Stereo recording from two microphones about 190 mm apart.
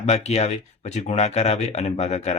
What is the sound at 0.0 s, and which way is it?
Speech, 35° left (ahead or behind).